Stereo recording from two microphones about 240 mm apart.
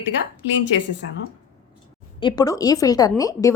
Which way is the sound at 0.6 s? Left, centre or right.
Left.